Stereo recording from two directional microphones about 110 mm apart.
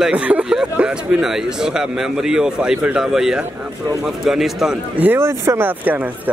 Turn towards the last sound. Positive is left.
turn(degrees=-25)  # may be behind; listen again after turning